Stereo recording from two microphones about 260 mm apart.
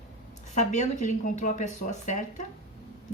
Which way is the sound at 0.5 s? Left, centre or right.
Left.